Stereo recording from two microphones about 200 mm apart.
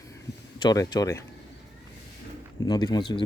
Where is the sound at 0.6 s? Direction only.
20° left (ahead or behind).